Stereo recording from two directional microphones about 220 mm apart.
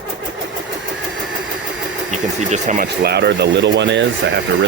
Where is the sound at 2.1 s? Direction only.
35° right (ahead or behind); by 4.4 s 55° right (ahead or behind).